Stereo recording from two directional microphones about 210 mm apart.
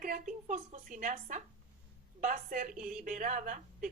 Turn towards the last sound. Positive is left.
turn(degrees=-35)  # may be behind; listen again after turning